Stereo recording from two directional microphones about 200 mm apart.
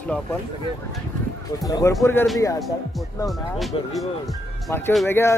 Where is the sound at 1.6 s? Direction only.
15° left (ahead or behind).